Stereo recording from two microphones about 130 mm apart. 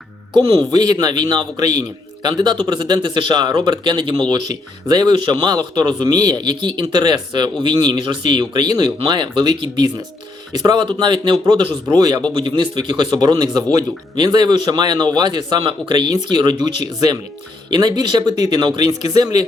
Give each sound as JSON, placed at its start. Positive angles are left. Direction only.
{"t": 0.3, "sound": "speech", "side_deg": -30}